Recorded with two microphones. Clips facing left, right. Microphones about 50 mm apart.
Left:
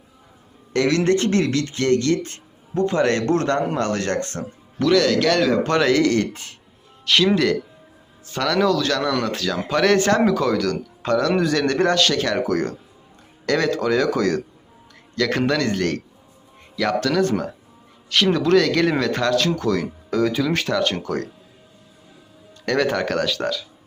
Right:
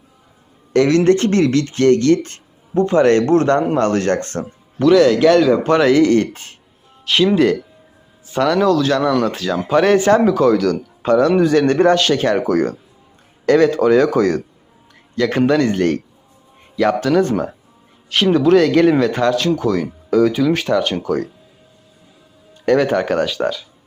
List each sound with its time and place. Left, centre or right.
0.7 s speech: right
2.7 s speech: right
4.8 s speech: centre; by 6.5 s right
7.0 s speech: centre
8.3 s speech: centre
11.1 s speech: right
15.1 s speech: centre
22.6 s speech: centre